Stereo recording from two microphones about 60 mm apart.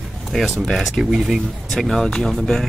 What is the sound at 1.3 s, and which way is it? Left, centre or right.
Speech, centre.